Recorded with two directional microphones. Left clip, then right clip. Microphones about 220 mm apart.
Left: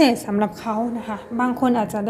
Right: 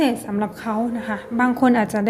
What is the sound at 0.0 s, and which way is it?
Speech, 10° left (ahead or behind).